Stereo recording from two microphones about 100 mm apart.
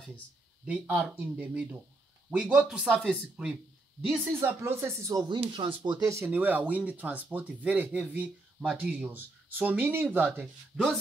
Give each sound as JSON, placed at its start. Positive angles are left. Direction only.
{"t": 0.9, "sound": "speech", "side_deg": -15}
{"t": 4.1, "sound": "speech", "side_deg": -20}
{"t": 5.5, "sound": "speech", "side_deg": -55}
{"t": 6.0, "sound": "speech", "side_deg": -30}
{"t": 6.3, "sound": "speech", "side_deg": -15}
{"t": 10.7, "sound": "speech", "side_deg": 0}